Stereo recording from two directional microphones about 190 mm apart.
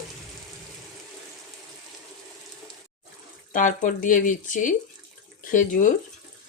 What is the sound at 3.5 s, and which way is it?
Speech, 45° left (ahead or behind).